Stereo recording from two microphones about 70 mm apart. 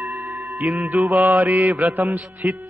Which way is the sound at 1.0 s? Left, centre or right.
Right.